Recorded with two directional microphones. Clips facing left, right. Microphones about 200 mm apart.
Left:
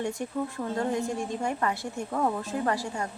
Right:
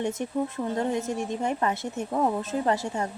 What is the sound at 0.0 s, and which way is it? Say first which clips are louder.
A woman's voice: right 3 dB; 20° right (ahead or behind).